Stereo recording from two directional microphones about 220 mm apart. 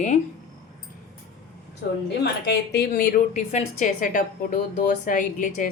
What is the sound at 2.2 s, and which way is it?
A woman's voice, 50° left (ahead or behind).